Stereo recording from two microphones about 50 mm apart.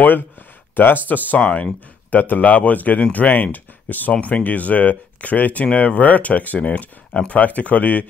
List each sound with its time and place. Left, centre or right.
0.7 s speech: left